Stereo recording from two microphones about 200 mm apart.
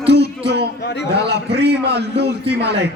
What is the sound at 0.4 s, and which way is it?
Speech, 55° right (ahead or behind).